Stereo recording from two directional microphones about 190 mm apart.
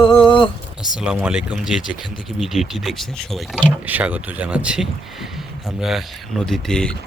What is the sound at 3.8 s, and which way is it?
Speech, 10° right (ahead or behind).